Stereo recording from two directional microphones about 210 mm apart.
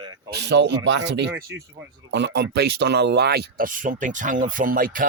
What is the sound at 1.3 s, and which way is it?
Speech, 15° right (ahead or behind).